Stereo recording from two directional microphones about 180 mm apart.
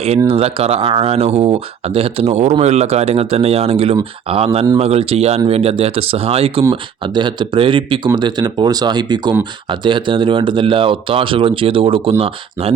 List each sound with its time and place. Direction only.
0.3 s speech: 35° right (ahead or behind)